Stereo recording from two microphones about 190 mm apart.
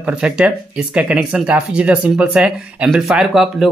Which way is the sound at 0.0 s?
5° right (ahead or behind).